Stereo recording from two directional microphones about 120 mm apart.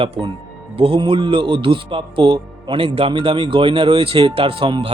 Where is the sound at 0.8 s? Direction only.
50° right (ahead or behind).